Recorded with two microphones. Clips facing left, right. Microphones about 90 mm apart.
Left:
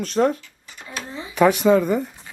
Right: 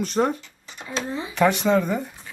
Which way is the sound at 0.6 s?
20° right (ahead or behind).